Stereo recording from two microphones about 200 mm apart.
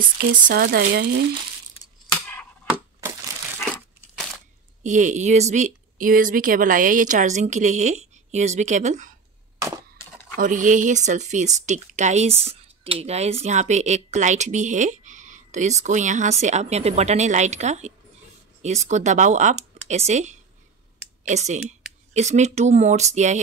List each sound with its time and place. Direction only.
0.2 s speech: 45° right (ahead or behind)
4.8 s speech: 35° right (ahead or behind)
10.3 s speech: 40° right (ahead or behind)